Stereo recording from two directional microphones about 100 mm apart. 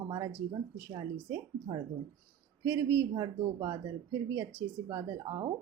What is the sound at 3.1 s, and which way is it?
Speech, 40° right (ahead or behind).